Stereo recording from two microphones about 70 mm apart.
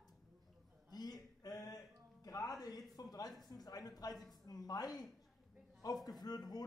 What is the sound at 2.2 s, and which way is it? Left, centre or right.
Music, left.